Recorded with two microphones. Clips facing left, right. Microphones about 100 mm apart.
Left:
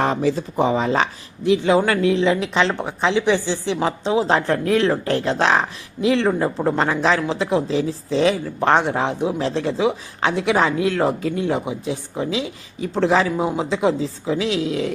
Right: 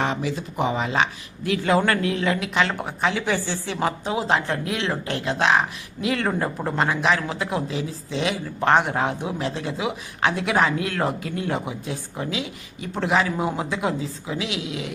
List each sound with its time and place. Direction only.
0.0 s speech: 40° left (ahead or behind)
1.5 s speech: 20° left (ahead or behind)
4.4 s speech: 40° left (ahead or behind); by 6.7 s 20° left (ahead or behind)
6.7 s speech: 35° left (ahead or behind)